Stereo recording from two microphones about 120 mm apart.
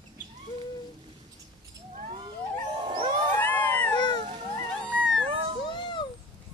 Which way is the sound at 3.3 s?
15° left (ahead or behind).